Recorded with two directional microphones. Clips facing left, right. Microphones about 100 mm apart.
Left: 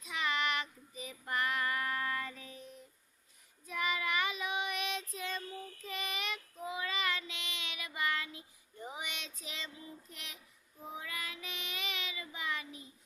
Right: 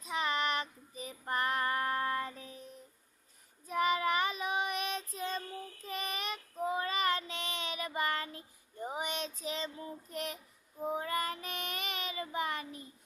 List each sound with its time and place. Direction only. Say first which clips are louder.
0.0 s child singing: right 2 dB; 35° right (ahead or behind)